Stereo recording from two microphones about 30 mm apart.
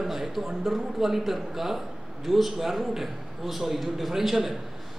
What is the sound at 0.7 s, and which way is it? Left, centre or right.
A man's voice, centre.